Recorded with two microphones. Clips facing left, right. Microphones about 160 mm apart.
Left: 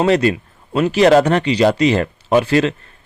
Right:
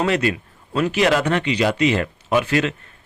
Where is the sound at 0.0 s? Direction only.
35° left (ahead or behind).